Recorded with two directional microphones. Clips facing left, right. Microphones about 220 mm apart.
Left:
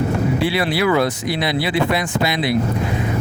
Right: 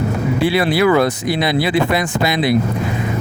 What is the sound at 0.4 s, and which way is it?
Speech, 45° right (ahead or behind).